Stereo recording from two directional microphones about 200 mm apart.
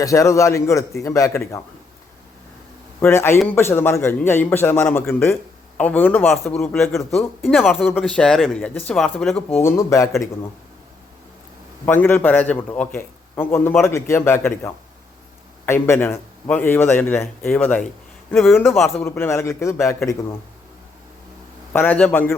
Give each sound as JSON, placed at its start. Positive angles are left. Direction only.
{"t": 0.0, "sound": "a man's voice", "side_deg": 15}
{"t": 3.0, "sound": "a man's voice", "side_deg": 10}
{"t": 11.9, "sound": "a man's voice", "side_deg": 10}
{"t": 21.7, "sound": "a man's voice", "side_deg": 10}